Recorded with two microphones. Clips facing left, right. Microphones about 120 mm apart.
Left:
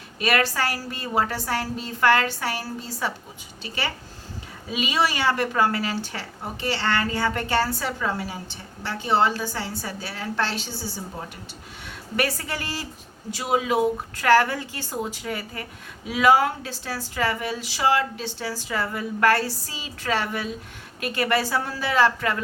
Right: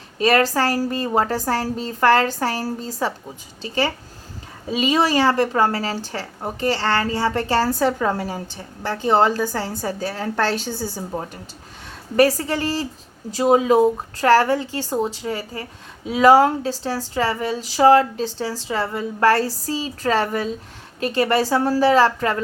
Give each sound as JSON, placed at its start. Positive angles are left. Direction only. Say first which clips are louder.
{"t": 0.2, "sound": "speech", "louder": "right 6 dB", "side_deg": -35}
{"t": 12.1, "sound": "speech", "louder": "right 10 dB", "side_deg": -35}